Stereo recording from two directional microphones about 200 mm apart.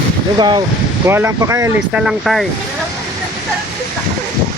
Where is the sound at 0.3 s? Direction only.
20° right (ahead or behind).